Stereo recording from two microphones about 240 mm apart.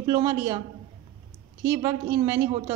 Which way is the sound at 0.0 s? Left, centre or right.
Centre.